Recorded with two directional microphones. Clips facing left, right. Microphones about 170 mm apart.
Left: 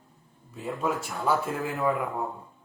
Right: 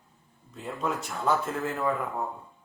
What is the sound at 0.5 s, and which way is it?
A man's voice, 10° left (ahead or behind).